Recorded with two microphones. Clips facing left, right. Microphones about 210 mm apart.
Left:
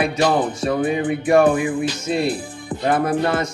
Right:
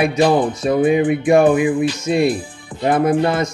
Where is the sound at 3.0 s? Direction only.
20° right (ahead or behind).